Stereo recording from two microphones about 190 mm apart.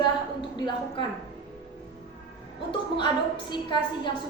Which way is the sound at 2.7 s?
25° left (ahead or behind).